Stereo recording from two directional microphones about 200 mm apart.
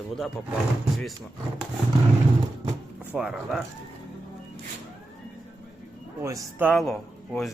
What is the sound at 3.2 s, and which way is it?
Speech, 5° right (ahead or behind).